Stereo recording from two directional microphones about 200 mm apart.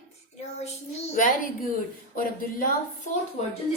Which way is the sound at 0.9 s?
35° left (ahead or behind).